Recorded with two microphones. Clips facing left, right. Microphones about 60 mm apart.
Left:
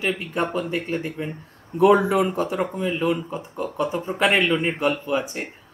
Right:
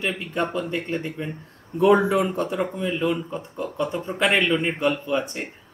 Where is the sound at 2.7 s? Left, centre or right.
Centre.